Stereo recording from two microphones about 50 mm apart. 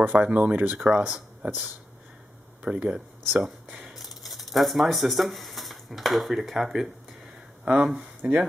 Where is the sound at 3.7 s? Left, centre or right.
Centre.